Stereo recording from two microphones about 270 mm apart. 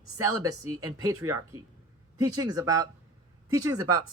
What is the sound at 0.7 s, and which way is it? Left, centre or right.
Speech, centre.